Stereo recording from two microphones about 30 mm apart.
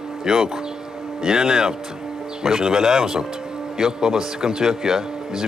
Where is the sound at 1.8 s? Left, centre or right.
Centre.